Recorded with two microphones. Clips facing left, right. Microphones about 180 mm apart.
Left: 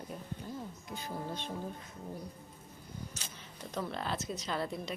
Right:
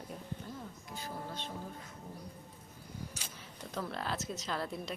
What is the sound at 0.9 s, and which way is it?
Speech, 15° left (ahead or behind).